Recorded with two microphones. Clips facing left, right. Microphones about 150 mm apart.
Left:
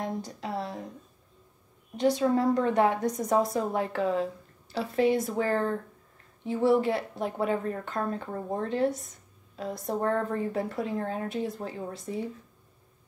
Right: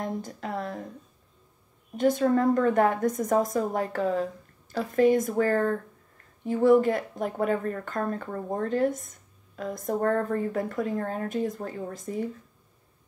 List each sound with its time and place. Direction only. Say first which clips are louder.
0.4 s a woman's voice: right 1 dB; 50° right (ahead or behind)
2.0 s a woman's voice: right 2 dB; 50° right (ahead or behind)